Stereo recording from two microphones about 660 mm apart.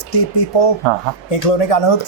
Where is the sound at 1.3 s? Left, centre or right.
Left.